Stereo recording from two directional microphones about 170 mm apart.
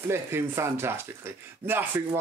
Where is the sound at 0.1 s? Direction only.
15° right (ahead or behind).